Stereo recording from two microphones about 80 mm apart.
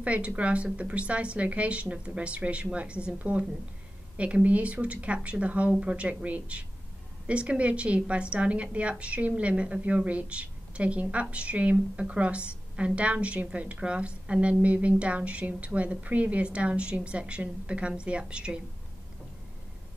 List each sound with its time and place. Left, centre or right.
0.0 s a woman's voice: centre